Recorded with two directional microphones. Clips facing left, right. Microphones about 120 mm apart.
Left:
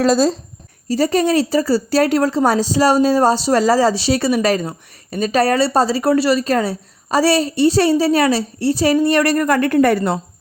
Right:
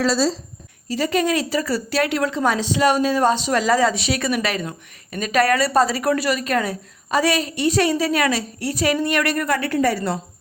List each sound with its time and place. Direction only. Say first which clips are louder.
0.0 s a woman's voice: left 5 dB; 50° left (ahead or behind)
0.9 s a woman's voice: left 5 dB; 35° left (ahead or behind); by 10.2 s 55° left (ahead or behind)